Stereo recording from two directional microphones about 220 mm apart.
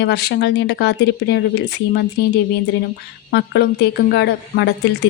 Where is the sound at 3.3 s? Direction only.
50° left (ahead or behind).